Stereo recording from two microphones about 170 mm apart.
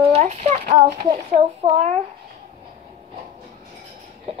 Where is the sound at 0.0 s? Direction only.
40° right (ahead or behind).